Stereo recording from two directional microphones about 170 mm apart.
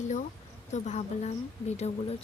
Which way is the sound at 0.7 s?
40° left (ahead or behind).